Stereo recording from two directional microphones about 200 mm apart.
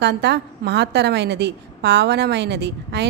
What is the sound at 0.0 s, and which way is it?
A woman's voice, 60° right (ahead or behind).